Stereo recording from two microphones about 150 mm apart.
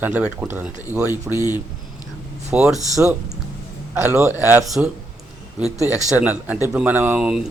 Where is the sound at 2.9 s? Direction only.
20° right (ahead or behind).